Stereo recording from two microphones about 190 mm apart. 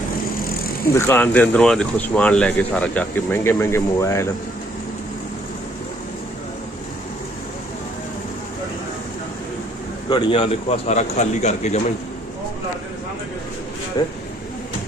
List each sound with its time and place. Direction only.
0.9 s speech: 10° left (ahead or behind)
10.1 s a man's voice: 25° left (ahead or behind)
14.0 s speech: 20° left (ahead or behind)